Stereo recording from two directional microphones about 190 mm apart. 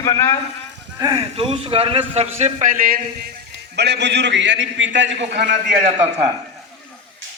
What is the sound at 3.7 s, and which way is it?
A man's voice, 60° right (ahead or behind).